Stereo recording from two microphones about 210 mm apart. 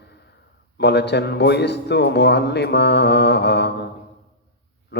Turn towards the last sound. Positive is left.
turn(degrees=55)  # may be behind; listen again after turning